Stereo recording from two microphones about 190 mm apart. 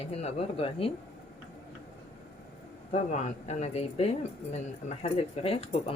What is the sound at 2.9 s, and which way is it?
Speech, 35° left (ahead or behind).